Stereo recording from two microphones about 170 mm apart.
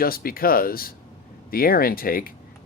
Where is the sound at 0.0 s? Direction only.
60° left (ahead or behind).